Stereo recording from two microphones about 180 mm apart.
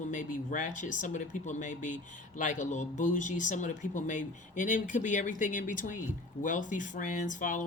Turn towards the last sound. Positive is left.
turn(degrees=45)  # may be behind; listen again after turning